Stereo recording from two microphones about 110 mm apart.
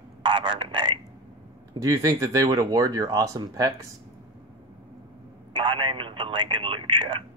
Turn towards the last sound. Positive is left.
turn(degrees=-55)  # may be behind; listen again after turning